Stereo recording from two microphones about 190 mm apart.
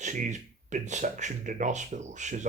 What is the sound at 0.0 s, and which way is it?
Speech, 40° right (ahead or behind).